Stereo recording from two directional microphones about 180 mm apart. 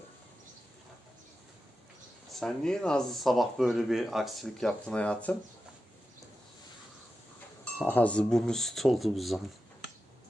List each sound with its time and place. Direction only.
2.4 s speech: 5° left (ahead or behind)
7.6 s speech: 10° left (ahead or behind)